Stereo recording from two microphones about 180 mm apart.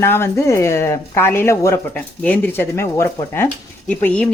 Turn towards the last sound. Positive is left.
turn(degrees=5)  # may be behind; listen again after turning